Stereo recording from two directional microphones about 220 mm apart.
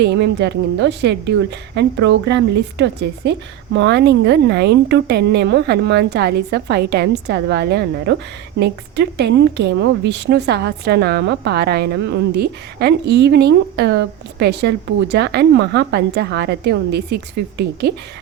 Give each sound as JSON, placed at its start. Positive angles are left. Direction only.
{"t": 0.0, "sound": "a woman's voice", "side_deg": -50}